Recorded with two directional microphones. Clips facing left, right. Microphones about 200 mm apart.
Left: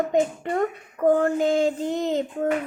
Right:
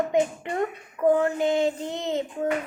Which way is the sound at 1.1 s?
45° left (ahead or behind).